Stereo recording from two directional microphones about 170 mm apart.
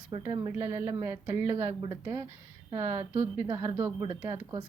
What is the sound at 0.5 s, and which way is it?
Speech, 15° right (ahead or behind).